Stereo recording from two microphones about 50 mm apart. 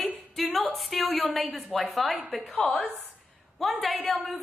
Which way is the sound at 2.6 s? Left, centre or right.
Left.